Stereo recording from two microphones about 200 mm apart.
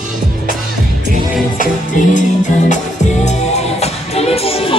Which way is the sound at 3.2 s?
35° left (ahead or behind).